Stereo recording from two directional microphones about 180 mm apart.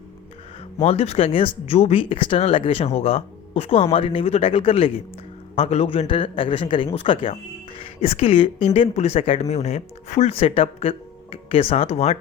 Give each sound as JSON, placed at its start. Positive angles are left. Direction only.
{"t": 0.8, "sound": "speech", "side_deg": 35}